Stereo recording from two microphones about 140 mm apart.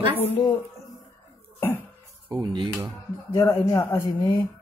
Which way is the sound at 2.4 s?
35° right (ahead or behind).